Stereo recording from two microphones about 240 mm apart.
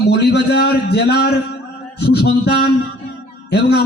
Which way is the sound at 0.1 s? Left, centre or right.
Left.